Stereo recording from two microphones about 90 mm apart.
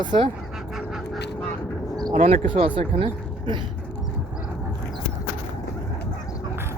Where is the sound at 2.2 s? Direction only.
80° right.